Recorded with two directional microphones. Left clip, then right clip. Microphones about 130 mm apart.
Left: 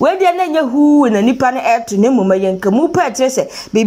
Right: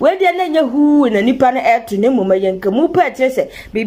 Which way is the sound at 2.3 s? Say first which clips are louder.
Left 1 dB; 10° right (ahead or behind).